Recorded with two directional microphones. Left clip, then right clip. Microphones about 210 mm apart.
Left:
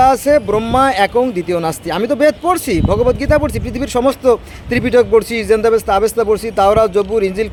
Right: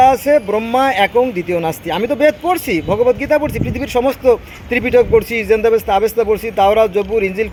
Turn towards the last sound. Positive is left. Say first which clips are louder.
# left 1 dB
turn(degrees=15)  # may be behind; listen again after turning